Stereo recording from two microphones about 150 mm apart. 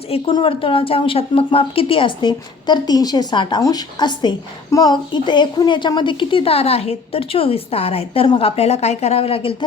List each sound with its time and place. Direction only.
0.1 s a woman's voice: 35° left (ahead or behind)